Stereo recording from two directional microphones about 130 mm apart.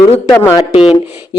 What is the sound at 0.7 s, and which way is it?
Speech, 45° left (ahead or behind).